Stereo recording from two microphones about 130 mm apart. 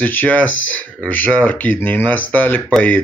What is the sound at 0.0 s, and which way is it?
Speech, 15° left (ahead or behind).